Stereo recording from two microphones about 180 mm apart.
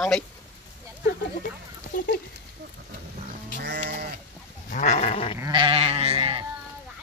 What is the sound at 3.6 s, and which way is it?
Sheep, 65° right (ahead or behind).